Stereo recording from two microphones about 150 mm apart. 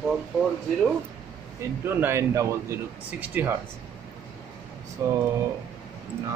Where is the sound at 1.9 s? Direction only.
15° right (ahead or behind).